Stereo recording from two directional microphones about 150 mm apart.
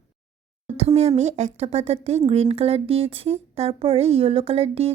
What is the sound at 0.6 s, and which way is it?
Speech, 45° right (ahead or behind).